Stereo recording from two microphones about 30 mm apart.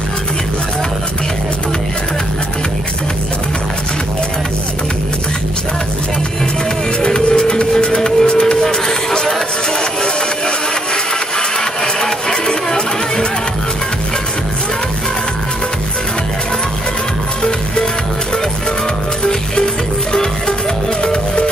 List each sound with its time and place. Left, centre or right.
7.2 s music: left
11.3 s music: left
17.4 s music: left
19.2 s music: left